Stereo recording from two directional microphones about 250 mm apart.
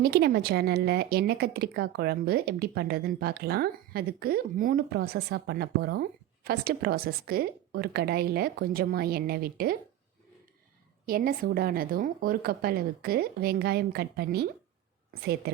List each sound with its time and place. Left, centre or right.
0.0 s speech: right
11.0 s speech: right